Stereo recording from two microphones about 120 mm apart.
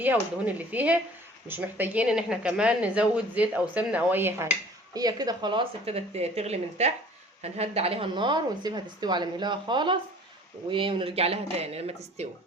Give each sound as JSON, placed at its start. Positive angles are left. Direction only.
{"t": 0.0, "sound": "speech", "side_deg": -15}
{"t": 4.9, "sound": "speech", "side_deg": -35}
{"t": 5.8, "sound": "speech", "side_deg": -60}